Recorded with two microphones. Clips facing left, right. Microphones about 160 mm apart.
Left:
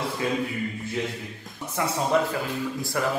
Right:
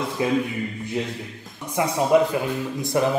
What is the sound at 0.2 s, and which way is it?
Speech, 20° right (ahead or behind).